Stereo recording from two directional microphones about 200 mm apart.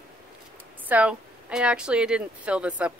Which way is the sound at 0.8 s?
5° right (ahead or behind).